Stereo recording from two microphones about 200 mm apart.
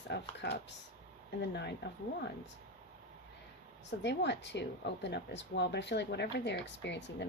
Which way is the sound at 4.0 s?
60° left (ahead or behind).